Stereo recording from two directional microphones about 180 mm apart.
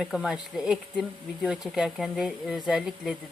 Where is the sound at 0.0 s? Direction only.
Centre (ahead or behind).